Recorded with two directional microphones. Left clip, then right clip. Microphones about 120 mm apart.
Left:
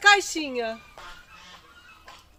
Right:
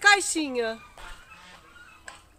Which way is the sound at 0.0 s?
35° right (ahead or behind).